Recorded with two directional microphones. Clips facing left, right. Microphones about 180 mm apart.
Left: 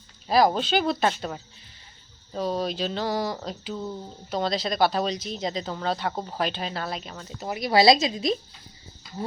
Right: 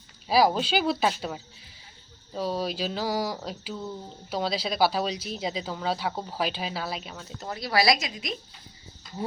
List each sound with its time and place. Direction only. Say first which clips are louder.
0.3 s speech: left 1 dB; 5° right (ahead or behind)
7.4 s a woman's voice: left 5 dB; 15° left (ahead or behind)